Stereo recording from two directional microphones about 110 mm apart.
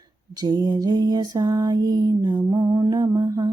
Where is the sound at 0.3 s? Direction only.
40° right (ahead or behind).